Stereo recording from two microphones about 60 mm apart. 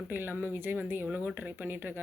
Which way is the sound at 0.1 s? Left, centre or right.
Right.